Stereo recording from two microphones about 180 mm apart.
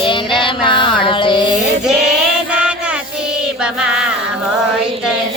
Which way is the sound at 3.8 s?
5° right (ahead or behind).